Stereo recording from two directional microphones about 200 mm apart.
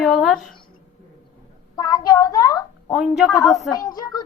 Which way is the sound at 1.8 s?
20° left (ahead or behind).